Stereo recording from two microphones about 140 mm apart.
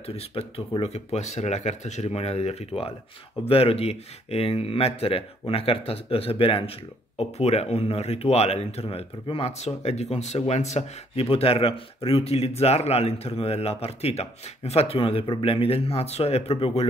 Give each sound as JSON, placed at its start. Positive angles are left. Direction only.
{"t": 0.0, "sound": "speech", "side_deg": 45}